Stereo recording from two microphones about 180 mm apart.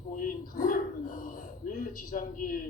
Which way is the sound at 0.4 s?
50° left (ahead or behind).